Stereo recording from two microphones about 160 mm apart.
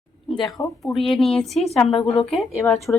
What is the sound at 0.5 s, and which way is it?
Speech, 20° left (ahead or behind).